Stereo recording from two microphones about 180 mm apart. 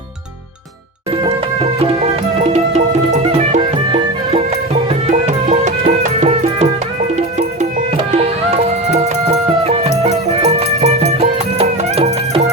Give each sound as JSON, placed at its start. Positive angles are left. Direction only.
{"t": 2.4, "sound": "music", "side_deg": -35}
{"t": 5.1, "sound": "music", "side_deg": -40}
{"t": 7.9, "sound": "music", "side_deg": -35}